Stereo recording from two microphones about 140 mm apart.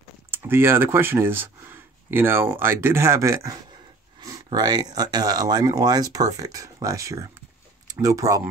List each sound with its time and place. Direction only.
0.3 s speech: 15° right (ahead or behind)